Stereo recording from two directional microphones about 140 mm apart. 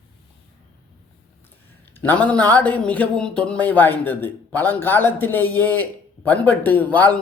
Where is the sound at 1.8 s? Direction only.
15° left (ahead or behind).